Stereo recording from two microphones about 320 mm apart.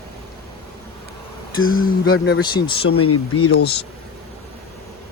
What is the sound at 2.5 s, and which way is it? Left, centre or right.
Speech, centre.